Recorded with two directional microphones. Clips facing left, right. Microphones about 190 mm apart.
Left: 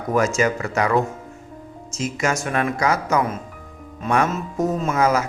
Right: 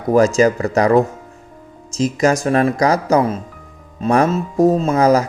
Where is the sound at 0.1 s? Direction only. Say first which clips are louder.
Right 7 dB; 35° right (ahead or behind).